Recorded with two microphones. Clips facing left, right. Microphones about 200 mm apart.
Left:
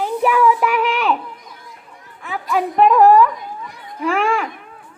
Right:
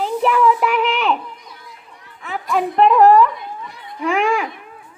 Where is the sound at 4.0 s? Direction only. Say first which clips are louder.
Even; 5° left (ahead or behind).